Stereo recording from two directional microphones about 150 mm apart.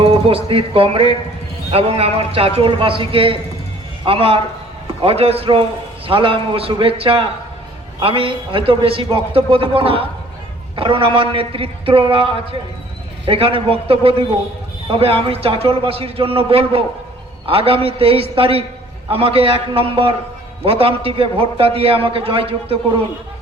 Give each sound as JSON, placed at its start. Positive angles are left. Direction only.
{"t": 0.0, "sound": "a man's voice", "side_deg": -35}